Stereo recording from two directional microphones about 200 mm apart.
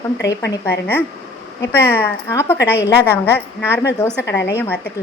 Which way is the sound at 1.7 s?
10° left (ahead or behind).